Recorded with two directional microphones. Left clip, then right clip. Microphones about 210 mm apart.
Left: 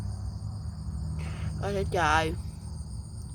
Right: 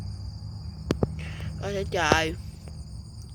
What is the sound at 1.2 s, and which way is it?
Speech, 10° left (ahead or behind).